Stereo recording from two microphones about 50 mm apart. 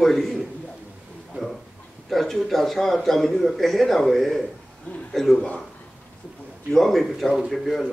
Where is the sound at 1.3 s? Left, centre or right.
Centre.